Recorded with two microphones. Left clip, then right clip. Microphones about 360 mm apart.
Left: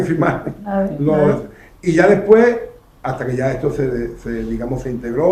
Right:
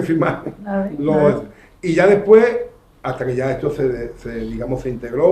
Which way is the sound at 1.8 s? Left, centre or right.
Right.